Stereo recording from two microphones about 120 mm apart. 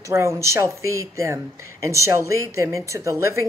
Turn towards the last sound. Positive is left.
turn(degrees=-25)  # may be behind; listen again after turning